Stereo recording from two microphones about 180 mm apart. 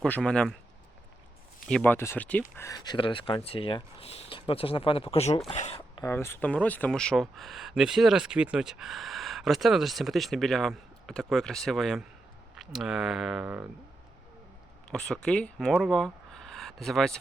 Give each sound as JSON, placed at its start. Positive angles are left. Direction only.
{"t": 0.0, "sound": "speech", "side_deg": 5}
{"t": 1.6, "sound": "speech", "side_deg": 5}
{"t": 2.6, "sound": "speech", "side_deg": 20}
{"t": 6.0, "sound": "speech", "side_deg": 15}
{"t": 14.8, "sound": "speech", "side_deg": 5}